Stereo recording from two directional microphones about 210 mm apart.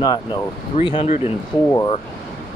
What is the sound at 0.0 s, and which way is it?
Speech, 20° left (ahead or behind).